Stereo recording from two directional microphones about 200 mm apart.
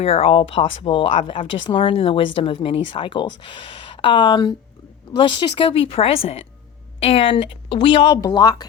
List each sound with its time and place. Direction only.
0.0 s speech: 30° left (ahead or behind)